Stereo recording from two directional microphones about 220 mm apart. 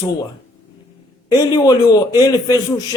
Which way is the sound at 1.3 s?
15° left (ahead or behind).